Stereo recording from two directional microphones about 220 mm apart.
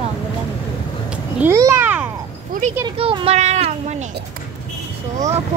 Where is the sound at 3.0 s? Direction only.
25° right (ahead or behind).